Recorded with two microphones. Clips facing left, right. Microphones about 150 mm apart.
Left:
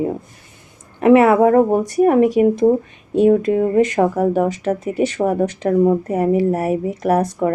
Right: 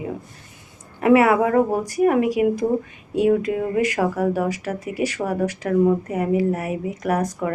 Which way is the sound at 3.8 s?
25° left (ahead or behind).